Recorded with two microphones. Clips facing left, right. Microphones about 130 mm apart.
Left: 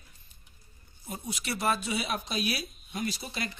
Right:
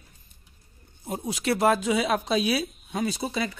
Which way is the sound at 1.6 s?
90° right.